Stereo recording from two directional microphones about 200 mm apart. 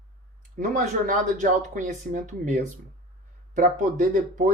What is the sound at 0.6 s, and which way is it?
Speech, 40° right (ahead or behind).